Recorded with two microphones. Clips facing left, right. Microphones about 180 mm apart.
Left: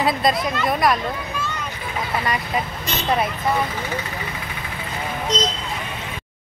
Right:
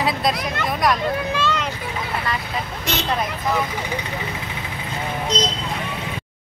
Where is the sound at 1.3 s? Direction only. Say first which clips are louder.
Right 6 dB; 90° right.